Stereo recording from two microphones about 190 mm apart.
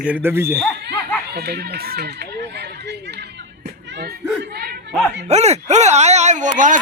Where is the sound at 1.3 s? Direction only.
60° right (ahead or behind).